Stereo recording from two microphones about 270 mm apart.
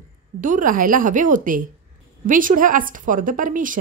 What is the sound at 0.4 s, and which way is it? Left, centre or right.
A woman's voice, right.